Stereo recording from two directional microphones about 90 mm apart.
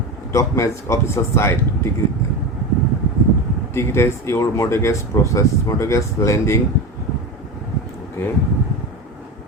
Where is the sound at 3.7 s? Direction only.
30° left (ahead or behind).